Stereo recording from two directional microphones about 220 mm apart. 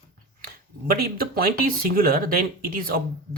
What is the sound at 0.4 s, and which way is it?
Speech, 40° right (ahead or behind).